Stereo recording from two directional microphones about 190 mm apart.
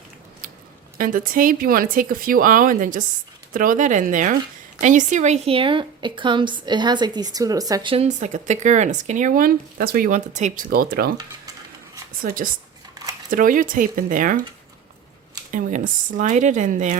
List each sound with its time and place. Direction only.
0.9 s a woman's voice: 45° right (ahead or behind); by 8.0 s 25° right (ahead or behind)
8.0 s speech: 40° right (ahead or behind)
12.2 s speech: 50° right (ahead or behind)
15.5 s speech: 45° right (ahead or behind)